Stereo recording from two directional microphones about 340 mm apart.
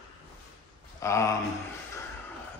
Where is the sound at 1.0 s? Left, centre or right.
Centre.